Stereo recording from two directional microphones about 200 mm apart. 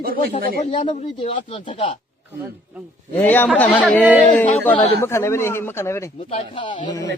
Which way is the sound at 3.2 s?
10° left (ahead or behind).